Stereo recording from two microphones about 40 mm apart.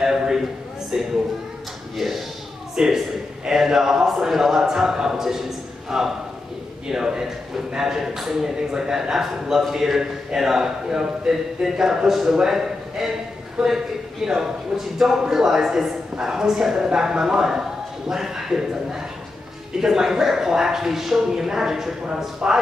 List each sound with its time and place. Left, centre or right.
0.0 s a sound: centre
0.9 s a man's voice: centre
2.0 s a man's voice: centre